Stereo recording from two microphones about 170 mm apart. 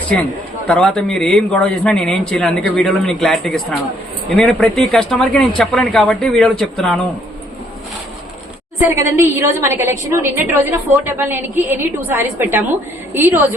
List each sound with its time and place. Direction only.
0.7 s a man's voice: 5° left (ahead or behind)
8.8 s a woman's voice: 15° right (ahead or behind)